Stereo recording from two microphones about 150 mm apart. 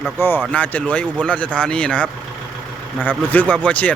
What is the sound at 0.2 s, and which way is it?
Speech, 15° left (ahead or behind).